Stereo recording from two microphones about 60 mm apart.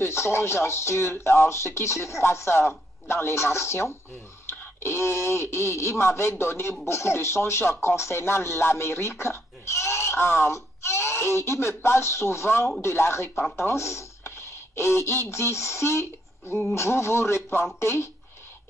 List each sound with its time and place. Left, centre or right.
0.0 s speech: left
13.3 s speech: centre
13.6 s speech: left